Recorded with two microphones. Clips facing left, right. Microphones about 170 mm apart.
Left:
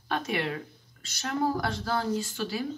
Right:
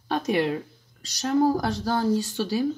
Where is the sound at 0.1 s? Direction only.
35° right (ahead or behind).